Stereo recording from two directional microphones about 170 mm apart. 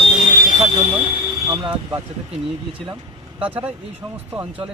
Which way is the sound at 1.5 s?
20° right (ahead or behind).